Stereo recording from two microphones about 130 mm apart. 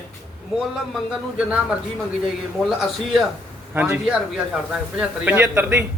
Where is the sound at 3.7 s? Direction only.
15° right (ahead or behind).